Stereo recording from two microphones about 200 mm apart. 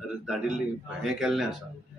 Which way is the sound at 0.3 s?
5° right (ahead or behind).